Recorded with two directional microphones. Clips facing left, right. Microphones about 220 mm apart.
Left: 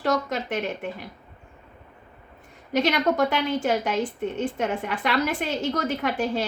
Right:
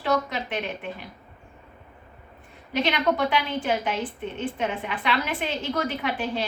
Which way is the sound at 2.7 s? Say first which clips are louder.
Left 2 dB; 45° left (ahead or behind).